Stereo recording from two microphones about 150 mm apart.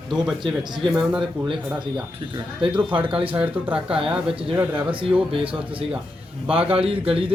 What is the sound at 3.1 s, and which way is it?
Speech, 40° right (ahead or behind).